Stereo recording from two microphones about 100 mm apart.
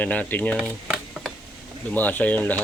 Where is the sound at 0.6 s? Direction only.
5° right (ahead or behind).